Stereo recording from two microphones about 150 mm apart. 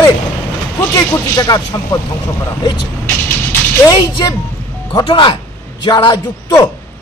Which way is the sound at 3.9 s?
30° left (ahead or behind).